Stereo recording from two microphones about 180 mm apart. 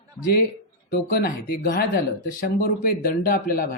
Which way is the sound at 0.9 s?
55° left (ahead or behind).